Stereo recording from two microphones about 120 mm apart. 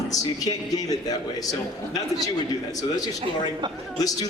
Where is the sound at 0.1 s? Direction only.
30° left (ahead or behind).